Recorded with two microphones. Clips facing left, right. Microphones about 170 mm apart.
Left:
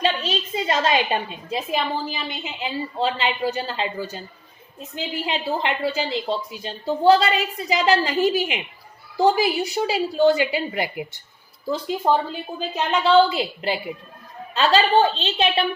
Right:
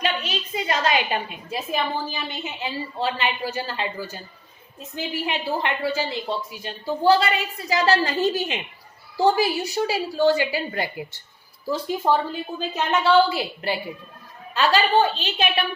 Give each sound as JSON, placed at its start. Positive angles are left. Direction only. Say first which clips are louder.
{"t": 0.0, "sound": "a woman's voice", "louder": "left 3 dB", "side_deg": 25}
{"t": 12.0, "sound": "a woman's voice", "louder": "left 1 dB", "side_deg": 15}